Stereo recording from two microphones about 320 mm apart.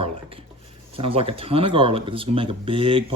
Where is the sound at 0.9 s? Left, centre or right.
Centre.